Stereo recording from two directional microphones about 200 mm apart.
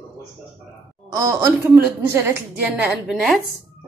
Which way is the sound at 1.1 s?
15° right (ahead or behind).